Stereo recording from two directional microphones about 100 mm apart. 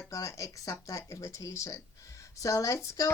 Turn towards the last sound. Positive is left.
turn(degrees=30)  # may be behind; listen again after turning